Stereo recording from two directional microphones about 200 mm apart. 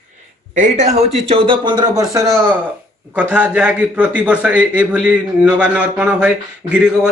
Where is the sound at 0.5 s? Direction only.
40° right (ahead or behind).